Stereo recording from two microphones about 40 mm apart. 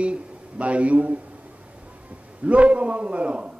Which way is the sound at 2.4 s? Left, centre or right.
Right.